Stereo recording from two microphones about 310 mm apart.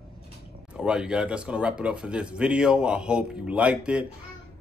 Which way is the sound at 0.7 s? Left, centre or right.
Centre.